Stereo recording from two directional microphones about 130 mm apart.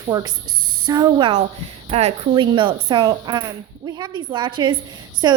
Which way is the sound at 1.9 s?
50° right (ahead or behind).